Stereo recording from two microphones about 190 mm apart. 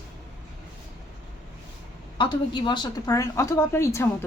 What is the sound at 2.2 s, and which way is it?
A woman's voice, 25° left (ahead or behind).